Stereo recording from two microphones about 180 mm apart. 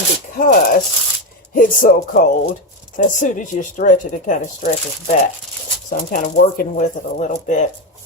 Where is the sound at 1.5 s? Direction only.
50° left (ahead or behind).